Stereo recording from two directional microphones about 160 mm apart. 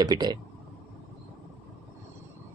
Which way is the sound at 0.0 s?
25° right (ahead or behind).